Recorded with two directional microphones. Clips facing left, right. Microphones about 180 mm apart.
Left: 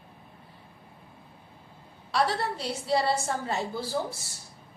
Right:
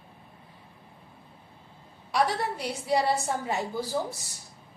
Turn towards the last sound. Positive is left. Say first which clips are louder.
# right 1 dB
turn(degrees=-15)  # may be behind; listen again after turning